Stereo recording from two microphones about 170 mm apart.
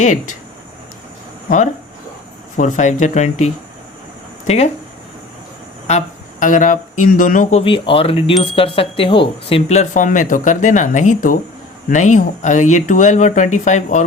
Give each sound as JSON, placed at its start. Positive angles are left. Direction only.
{"t": 0.0, "sound": "speech", "side_deg": 45}
{"t": 1.5, "sound": "speech", "side_deg": 45}
{"t": 5.9, "sound": "speech", "side_deg": 40}
{"t": 7.6, "sound": "speech", "side_deg": 30}